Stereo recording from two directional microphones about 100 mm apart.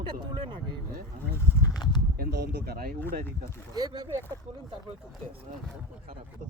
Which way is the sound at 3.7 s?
40° right (ahead or behind).